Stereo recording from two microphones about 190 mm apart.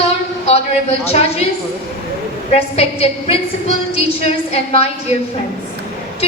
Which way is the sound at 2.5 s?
30° left (ahead or behind).